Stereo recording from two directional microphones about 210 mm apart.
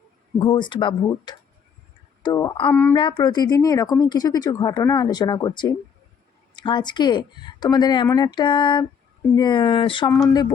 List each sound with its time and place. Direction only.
0.3 s speech: 20° left (ahead or behind)
10.1 s speech: centre (ahead or behind)